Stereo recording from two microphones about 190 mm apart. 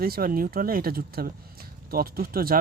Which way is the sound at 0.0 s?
50° right (ahead or behind).